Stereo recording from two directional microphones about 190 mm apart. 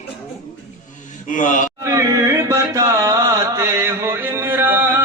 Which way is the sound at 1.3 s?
45° left (ahead or behind).